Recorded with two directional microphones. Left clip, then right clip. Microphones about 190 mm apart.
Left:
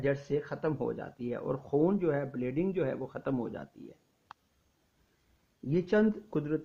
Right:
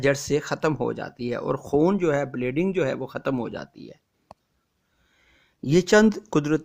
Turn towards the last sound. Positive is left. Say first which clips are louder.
# right 10 dB
turn(degrees=-45)  # may be behind; listen again after turning